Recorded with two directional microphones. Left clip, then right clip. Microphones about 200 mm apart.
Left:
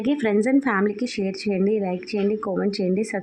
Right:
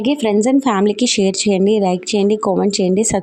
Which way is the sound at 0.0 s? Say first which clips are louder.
Right 6 dB; 30° right (ahead or behind).